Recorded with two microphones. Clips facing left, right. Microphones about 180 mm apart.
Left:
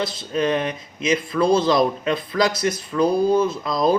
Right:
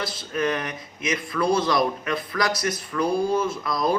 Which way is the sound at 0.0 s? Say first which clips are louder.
Left 4 dB; 25° left (ahead or behind).